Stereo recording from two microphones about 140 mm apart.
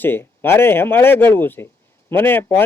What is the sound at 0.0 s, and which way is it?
Speech, 15° left (ahead or behind).